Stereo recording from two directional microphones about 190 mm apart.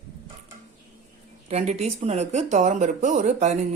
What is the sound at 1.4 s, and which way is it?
Speech, 35° right (ahead or behind).